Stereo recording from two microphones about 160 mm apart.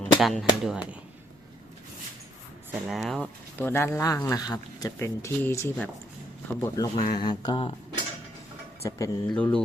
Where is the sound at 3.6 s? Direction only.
15° left (ahead or behind); by 7.7 s 30° left (ahead or behind).